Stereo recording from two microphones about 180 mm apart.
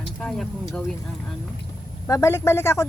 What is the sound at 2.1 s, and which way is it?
Speech, 15° left (ahead or behind).